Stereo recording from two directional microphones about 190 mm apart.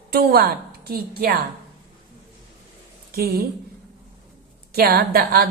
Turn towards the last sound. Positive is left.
turn(degrees=-55)  # may be behind; listen again after turning